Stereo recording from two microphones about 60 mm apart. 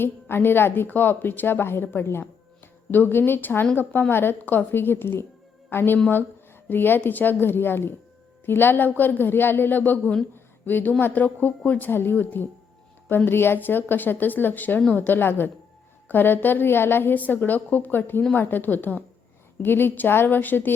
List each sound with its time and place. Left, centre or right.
0.0 s a woman's voice: left
10.3 s a sound: left
11.0 s a woman's voice: left